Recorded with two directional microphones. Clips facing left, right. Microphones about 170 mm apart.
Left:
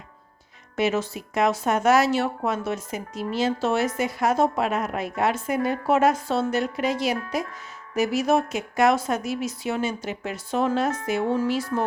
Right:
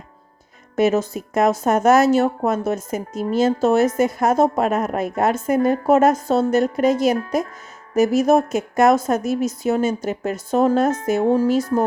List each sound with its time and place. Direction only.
0.8 s speech: 45° right (ahead or behind)